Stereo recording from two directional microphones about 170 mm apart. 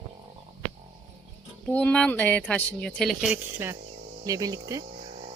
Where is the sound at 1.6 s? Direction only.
5° left (ahead or behind).